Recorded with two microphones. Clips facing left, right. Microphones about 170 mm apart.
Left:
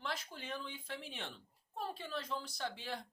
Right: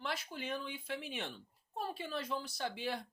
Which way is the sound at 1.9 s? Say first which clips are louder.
Right 3 dB; 10° right (ahead or behind).